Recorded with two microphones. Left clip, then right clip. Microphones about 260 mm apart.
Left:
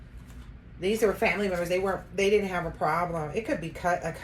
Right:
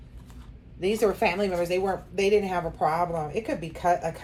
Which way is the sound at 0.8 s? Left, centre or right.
Centre.